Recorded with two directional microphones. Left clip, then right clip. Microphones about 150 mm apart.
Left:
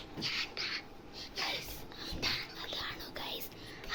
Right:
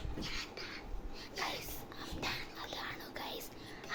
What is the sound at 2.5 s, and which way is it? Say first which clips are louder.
Whispering: left 3 dB; centre (ahead or behind).